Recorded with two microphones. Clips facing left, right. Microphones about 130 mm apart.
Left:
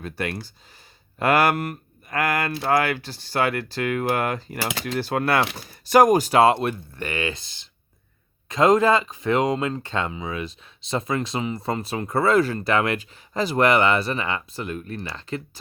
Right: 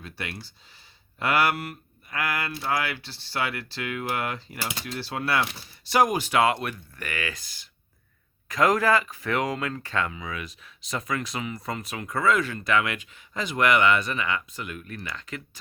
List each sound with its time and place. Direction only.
0.0 s speech: 45° left (ahead or behind)
4.6 s speech: 90° left
4.9 s speech: 50° left (ahead or behind); by 15.4 s 30° left (ahead or behind)